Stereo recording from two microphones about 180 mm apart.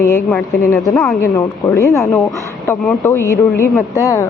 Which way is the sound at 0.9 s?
Centre (ahead or behind).